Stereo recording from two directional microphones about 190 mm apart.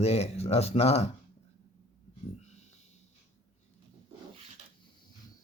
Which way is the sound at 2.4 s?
35° left (ahead or behind).